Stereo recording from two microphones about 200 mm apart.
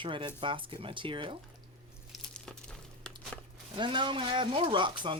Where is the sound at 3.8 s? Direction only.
25° right (ahead or behind).